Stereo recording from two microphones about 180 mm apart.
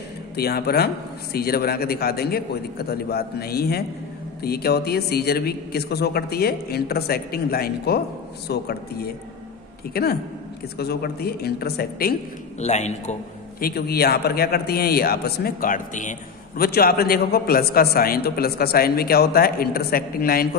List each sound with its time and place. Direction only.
0.4 s a man's voice: 60° left (ahead or behind)
12.5 s a man's voice: 40° left (ahead or behind)
13.7 s a man's voice: 60° left (ahead or behind)